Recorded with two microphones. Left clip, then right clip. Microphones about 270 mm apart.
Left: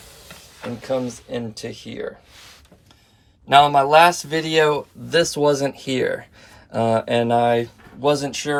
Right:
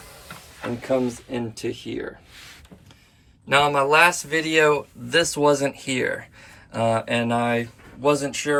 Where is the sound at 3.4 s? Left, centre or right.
Centre.